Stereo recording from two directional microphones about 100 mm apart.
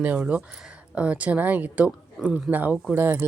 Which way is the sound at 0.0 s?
15° right (ahead or behind).